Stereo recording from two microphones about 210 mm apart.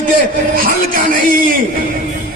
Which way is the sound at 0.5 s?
40° right (ahead or behind).